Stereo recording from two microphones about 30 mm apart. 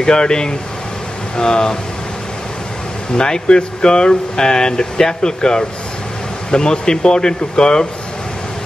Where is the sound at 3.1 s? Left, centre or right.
Left.